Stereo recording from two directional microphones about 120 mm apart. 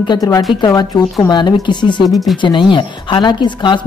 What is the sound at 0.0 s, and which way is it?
A woman's voice, 35° left (ahead or behind).